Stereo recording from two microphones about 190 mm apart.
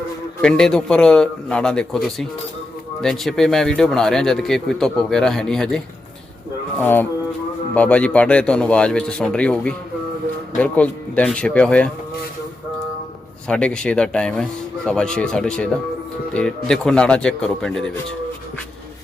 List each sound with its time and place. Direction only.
0.4 s speech: 5° left (ahead or behind)
3.0 s speech: centre (ahead or behind)
13.5 s speech: 5° left (ahead or behind)